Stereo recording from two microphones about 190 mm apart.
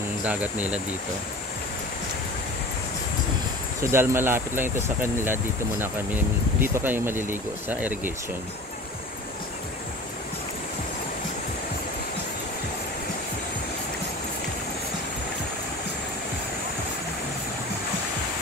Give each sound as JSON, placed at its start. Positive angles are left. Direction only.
{"t": 0.2, "sound": "speech", "side_deg": -10}
{"t": 3.8, "sound": "speech", "side_deg": -15}